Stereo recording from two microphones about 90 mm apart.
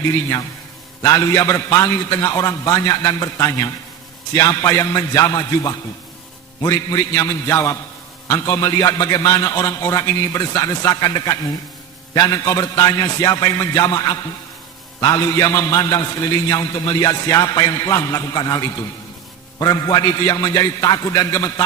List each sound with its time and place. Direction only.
1.0 s a man's voice: 40° left (ahead or behind)